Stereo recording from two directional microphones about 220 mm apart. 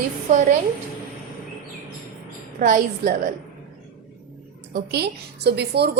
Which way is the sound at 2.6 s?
40° right (ahead or behind).